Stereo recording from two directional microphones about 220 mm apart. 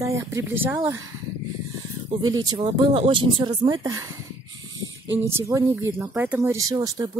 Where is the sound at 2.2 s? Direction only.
20° right (ahead or behind).